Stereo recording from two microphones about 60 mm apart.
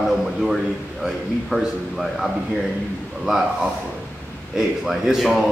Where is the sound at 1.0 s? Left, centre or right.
Centre.